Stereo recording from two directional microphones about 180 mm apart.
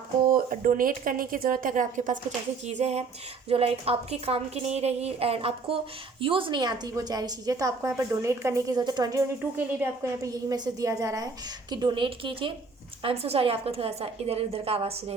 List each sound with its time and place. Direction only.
0.3 s a woman's voice: 50° right (ahead or behind); by 9.2 s 20° right (ahead or behind)
9.6 s a woman's voice: 10° right (ahead or behind); by 15.1 s 35° right (ahead or behind)